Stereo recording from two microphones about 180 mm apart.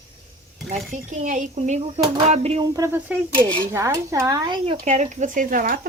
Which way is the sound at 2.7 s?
15° right (ahead or behind).